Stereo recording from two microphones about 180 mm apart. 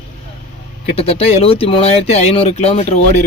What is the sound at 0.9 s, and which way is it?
Speech, 35° left (ahead or behind).